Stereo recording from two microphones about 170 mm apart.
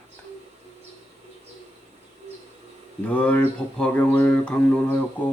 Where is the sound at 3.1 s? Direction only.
10° left (ahead or behind).